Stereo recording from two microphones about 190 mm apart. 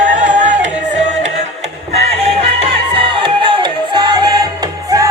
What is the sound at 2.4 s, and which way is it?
Music, 30° right (ahead or behind).